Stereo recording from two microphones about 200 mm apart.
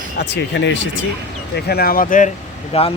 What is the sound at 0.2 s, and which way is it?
Speech, 60° left (ahead or behind).